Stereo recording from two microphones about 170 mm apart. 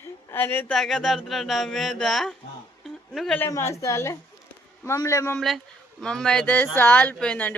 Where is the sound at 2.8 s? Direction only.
Centre (ahead or behind).